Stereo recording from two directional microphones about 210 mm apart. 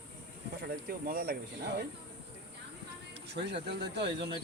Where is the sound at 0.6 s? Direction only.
45° right (ahead or behind).